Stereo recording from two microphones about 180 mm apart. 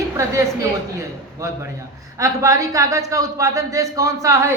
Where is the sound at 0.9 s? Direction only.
15° right (ahead or behind).